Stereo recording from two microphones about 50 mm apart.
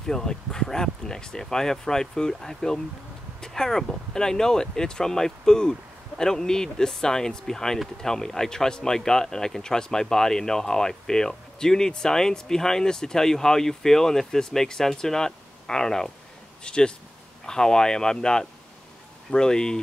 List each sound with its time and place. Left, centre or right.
0.0 s a man's voice: centre